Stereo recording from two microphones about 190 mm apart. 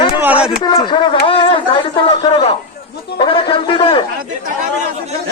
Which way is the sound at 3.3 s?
25° left (ahead or behind).